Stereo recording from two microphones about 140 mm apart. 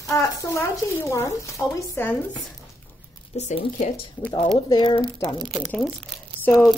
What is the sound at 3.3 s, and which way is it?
Speech, 55° left (ahead or behind).